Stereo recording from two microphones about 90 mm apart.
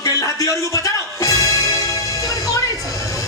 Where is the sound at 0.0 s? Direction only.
40° left (ahead or behind).